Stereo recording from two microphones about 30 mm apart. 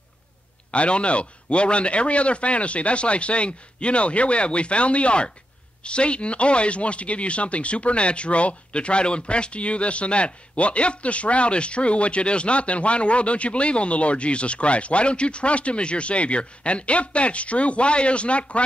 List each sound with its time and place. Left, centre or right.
0.7 s speech: left